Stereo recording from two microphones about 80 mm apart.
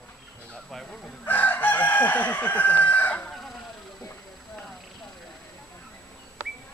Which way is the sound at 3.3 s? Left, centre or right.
Centre.